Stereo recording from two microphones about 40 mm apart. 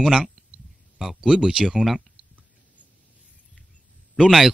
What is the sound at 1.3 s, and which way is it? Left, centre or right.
Speech, right.